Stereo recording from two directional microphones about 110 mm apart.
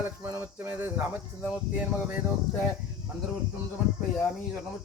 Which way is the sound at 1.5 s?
10° right (ahead or behind).